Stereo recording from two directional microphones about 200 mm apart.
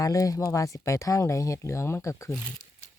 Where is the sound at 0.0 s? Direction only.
15° left (ahead or behind).